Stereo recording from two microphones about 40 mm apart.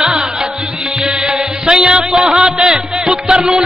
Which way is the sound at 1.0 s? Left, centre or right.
Centre.